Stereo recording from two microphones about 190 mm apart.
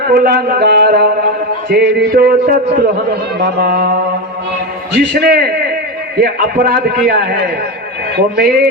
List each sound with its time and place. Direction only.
0.1 s a man's voice: 55° right (ahead or behind)
4.9 s a man's voice: 55° right (ahead or behind)